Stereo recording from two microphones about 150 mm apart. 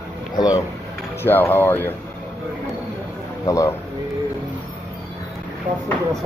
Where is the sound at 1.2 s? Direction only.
15° left (ahead or behind).